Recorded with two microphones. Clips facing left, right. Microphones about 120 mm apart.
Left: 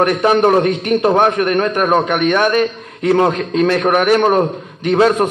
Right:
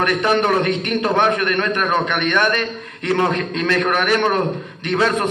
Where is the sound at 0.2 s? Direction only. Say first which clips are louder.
Left 5 dB; 35° left (ahead or behind).